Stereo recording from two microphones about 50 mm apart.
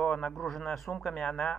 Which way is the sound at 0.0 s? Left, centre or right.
Centre.